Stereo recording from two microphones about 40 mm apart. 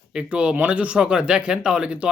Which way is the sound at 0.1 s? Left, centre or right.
Right.